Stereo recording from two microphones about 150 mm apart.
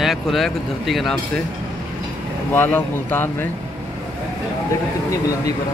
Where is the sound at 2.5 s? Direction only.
15° left (ahead or behind).